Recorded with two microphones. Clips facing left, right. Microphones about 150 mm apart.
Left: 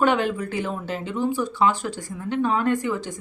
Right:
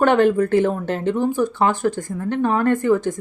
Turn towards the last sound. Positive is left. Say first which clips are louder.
# right 6 dB
turn(degrees=-50)  # may be behind; listen again after turning